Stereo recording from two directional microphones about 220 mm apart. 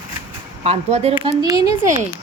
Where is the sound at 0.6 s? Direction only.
30° right (ahead or behind).